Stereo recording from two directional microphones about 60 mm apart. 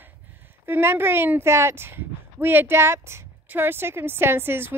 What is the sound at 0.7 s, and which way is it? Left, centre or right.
Speech, right.